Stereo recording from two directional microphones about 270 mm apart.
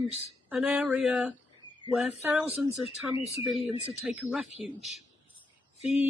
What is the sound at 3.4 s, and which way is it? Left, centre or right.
Speech, centre.